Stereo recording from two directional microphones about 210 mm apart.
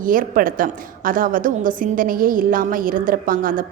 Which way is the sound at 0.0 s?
40° right (ahead or behind).